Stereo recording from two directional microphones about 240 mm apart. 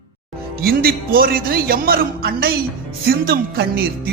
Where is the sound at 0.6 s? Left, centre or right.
Right.